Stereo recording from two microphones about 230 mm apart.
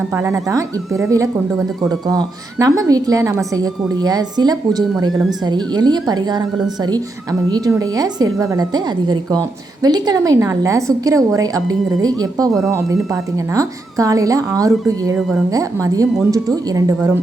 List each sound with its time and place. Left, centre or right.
0.1 s a woman's voice: centre